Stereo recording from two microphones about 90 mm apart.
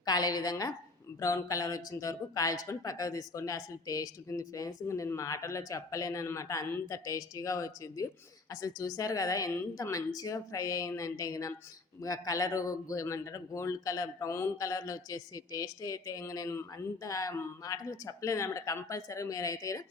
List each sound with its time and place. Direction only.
0.0 s a woman's voice: 45° left (ahead or behind)